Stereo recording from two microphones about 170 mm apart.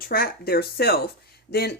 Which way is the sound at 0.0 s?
60° left (ahead or behind).